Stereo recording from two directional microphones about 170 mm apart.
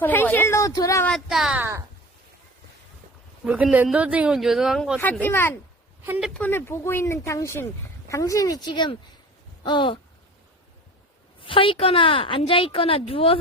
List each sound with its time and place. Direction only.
0.0 s a sound: 10° left (ahead or behind)
1.0 s speech: centre (ahead or behind)
3.4 s speech: 5° right (ahead or behind)
5.2 s speech: 15° left (ahead or behind); by 10.0 s 30° left (ahead or behind)
11.4 s a woman's voice: 30° left (ahead or behind)